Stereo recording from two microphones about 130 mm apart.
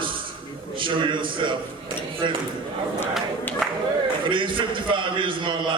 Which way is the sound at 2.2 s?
40° right (ahead or behind).